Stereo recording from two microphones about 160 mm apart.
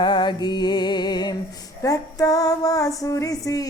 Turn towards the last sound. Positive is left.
turn(degrees=20)  # may be behind; listen again after turning